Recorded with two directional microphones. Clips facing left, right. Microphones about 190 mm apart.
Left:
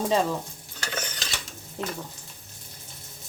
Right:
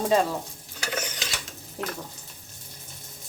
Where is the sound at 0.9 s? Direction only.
10° right (ahead or behind).